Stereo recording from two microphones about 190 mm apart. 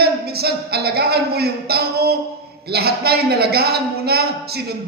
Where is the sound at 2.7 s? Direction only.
55° right (ahead or behind).